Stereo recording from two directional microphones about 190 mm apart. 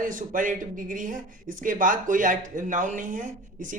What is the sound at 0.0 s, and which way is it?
A man's voice, 45° right (ahead or behind).